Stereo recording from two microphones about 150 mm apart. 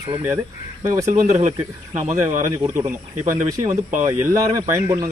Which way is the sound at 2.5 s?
20° right (ahead or behind).